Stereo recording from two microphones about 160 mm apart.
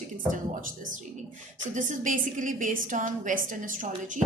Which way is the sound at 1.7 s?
55° right (ahead or behind).